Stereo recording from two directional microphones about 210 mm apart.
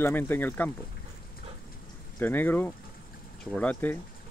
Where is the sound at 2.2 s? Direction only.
10° left (ahead or behind).